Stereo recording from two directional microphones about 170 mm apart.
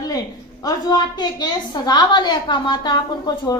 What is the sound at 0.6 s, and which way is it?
A woman's voice, 20° left (ahead or behind).